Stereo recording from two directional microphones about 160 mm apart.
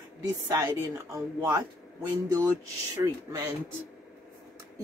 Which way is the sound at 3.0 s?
20° right (ahead or behind).